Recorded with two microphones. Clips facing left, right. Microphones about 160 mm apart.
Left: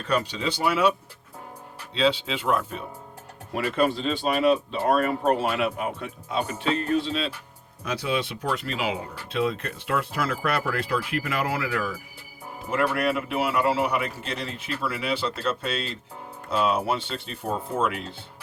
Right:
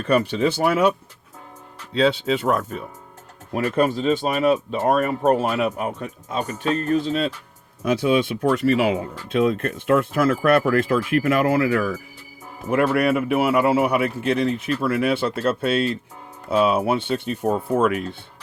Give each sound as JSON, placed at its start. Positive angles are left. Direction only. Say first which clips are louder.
{"t": 0.0, "sound": "a man's voice", "louder": "right 7 dB", "side_deg": -55}